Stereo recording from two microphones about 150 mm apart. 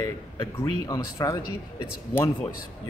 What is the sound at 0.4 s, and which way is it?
Speech, 25° left (ahead or behind).